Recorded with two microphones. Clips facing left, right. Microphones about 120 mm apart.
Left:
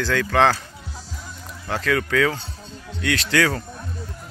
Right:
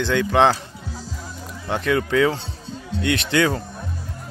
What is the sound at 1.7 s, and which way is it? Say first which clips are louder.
Speech: right 2 dB; 20° right (ahead or behind).